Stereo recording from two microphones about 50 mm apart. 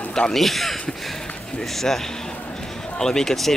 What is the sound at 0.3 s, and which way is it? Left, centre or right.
Speech, centre.